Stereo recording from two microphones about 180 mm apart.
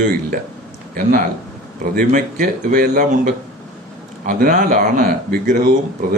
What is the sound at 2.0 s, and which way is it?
Speech, 50° right (ahead or behind).